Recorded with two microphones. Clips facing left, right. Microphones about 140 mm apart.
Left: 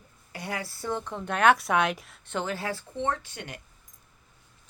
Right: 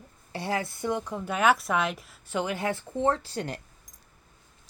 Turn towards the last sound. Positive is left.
turn(degrees=-35)  # may be behind; listen again after turning